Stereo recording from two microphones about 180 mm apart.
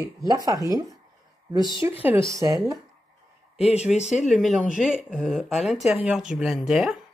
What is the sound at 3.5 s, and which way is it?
Speech, 35° left (ahead or behind).